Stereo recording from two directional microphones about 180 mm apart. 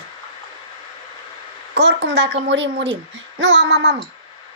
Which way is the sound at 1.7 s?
75° right (ahead or behind).